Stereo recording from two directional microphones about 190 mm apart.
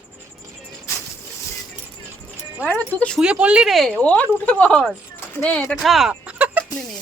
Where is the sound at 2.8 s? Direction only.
5° left (ahead or behind).